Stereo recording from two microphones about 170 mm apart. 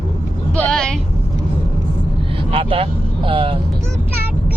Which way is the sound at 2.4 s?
35° right (ahead or behind).